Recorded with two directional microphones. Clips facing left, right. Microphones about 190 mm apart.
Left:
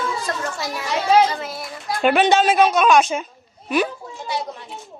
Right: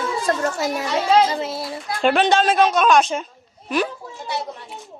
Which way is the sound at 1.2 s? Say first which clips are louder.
Right 2 dB; 25° right (ahead or behind).